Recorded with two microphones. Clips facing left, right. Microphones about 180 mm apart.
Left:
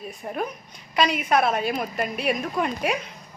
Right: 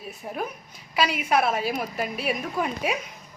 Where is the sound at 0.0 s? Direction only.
5° right (ahead or behind).